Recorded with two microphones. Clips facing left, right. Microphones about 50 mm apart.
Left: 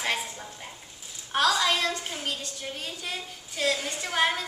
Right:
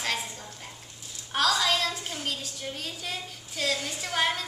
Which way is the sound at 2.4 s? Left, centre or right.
Centre.